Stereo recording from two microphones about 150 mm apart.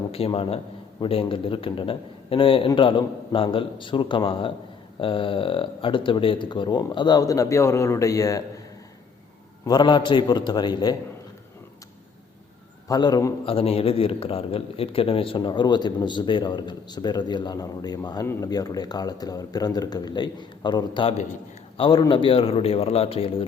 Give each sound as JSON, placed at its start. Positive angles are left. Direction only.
{"t": 0.1, "sound": "a man's voice", "side_deg": 40}
{"t": 9.6, "sound": "a man's voice", "side_deg": 30}
{"t": 12.9, "sound": "a man's voice", "side_deg": 25}
{"t": 13.4, "sound": "a man's voice", "side_deg": 40}
{"t": 21.8, "sound": "a man's voice", "side_deg": 25}